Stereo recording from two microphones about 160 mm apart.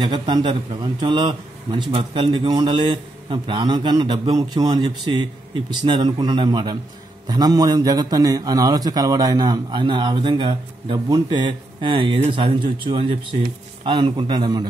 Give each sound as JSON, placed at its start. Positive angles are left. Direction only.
{"t": 0.0, "sound": "a man's voice", "side_deg": -30}